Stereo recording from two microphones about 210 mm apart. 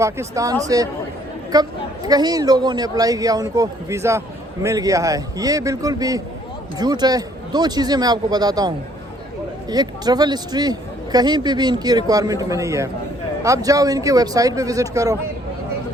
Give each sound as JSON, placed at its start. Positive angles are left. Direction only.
{"t": 0.0, "sound": "a man's voice", "side_deg": -15}
{"t": 1.5, "sound": "a man's voice", "side_deg": -20}